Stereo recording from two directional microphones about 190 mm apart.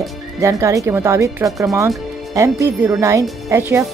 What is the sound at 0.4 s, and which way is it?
Speech, 15° right (ahead or behind).